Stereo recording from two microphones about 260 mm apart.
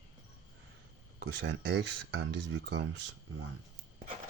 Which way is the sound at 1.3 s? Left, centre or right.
Right.